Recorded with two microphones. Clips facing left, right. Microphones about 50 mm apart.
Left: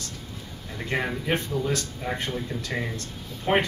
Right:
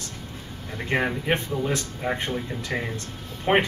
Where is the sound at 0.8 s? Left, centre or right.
Right.